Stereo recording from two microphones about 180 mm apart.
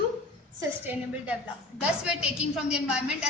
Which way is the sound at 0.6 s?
10° right (ahead or behind).